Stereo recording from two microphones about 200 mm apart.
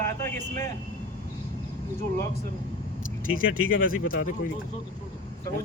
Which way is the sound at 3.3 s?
90° left.